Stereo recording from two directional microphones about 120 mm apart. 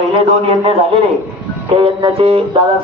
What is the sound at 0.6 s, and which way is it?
A man's voice, 50° right (ahead or behind).